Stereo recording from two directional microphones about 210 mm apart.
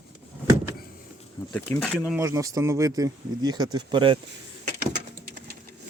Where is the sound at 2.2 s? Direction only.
15° right (ahead or behind).